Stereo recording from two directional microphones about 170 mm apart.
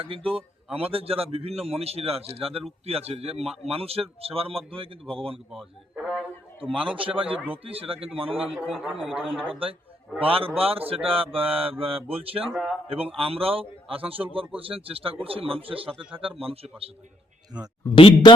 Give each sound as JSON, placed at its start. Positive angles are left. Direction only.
{"t": 0.0, "sound": "speech", "side_deg": -35}
{"t": 5.5, "sound": "a sound", "side_deg": -5}
{"t": 6.7, "sound": "speech", "side_deg": -30}
{"t": 8.5, "sound": "a man's voice", "side_deg": -10}
{"t": 10.2, "sound": "speech", "side_deg": -35}
{"t": 12.5, "sound": "speech", "side_deg": -5}
{"t": 12.9, "sound": "speech", "side_deg": -35}
{"t": 17.8, "sound": "a man's voice", "side_deg": 30}